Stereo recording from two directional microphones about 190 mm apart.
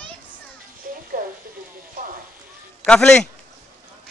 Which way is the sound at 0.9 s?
50° right (ahead or behind).